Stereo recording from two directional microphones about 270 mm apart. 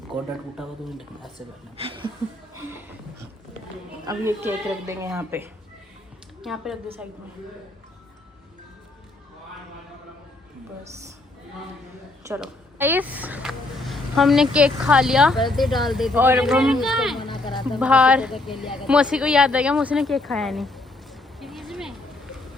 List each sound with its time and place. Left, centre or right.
0.1 s speech: centre
1.7 s speech: centre
2.6 s a sound: centre
4.0 s speech: centre
12.2 s speech: centre
17.2 s a sound: centre
17.7 s speech: centre